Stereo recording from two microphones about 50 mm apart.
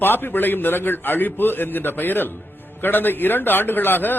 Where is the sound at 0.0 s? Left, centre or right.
Left.